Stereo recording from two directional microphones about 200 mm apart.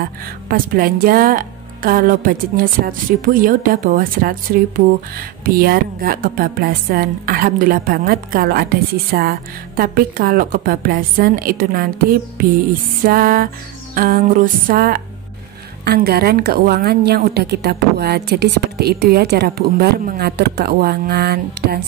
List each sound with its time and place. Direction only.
0.5 s a woman's voice: 45° right (ahead or behind)